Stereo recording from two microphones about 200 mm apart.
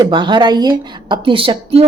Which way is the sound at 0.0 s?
25° right (ahead or behind).